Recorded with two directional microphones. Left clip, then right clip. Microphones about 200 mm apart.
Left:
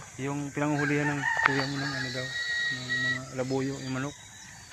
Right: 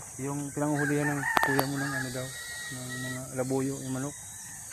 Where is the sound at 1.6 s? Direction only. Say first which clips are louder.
Right 1 dB; 30° right (ahead or behind).